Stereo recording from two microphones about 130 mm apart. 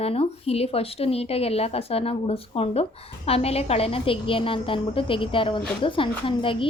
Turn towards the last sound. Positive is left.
turn(degrees=40)  # may be behind; listen again after turning